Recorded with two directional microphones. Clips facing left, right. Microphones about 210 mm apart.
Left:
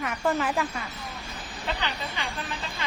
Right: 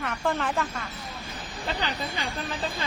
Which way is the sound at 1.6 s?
40° right (ahead or behind).